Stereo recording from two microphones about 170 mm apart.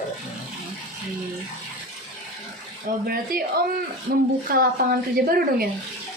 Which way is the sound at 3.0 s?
65° right (ahead or behind).